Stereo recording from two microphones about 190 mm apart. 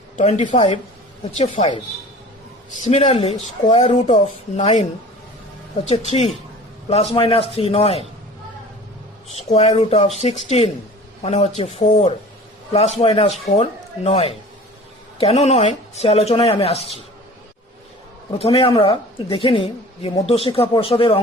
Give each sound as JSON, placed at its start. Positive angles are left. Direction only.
{"t": 0.2, "sound": "speech", "side_deg": 35}
{"t": 5.9, "sound": "speech", "side_deg": 35}
{"t": 9.5, "sound": "speech", "side_deg": 35}
{"t": 18.3, "sound": "a woman's voice", "side_deg": 30}